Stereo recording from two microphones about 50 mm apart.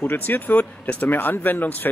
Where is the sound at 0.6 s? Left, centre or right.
Left.